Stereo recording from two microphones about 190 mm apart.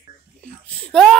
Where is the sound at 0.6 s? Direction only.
5° left (ahead or behind).